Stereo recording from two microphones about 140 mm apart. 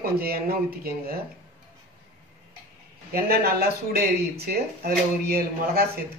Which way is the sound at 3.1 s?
90° right.